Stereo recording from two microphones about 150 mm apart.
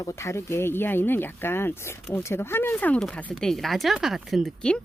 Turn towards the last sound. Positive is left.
turn(degrees=5)  # may be behind; listen again after turning